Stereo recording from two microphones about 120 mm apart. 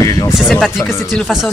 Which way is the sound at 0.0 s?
30° left (ahead or behind).